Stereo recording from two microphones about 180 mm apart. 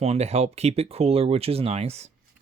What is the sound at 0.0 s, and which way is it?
Speech, 35° right (ahead or behind).